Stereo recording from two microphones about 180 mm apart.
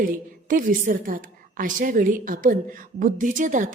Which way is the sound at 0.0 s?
50° right (ahead or behind).